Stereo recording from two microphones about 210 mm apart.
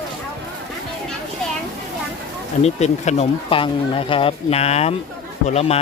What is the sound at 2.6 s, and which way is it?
Speech, 30° left (ahead or behind).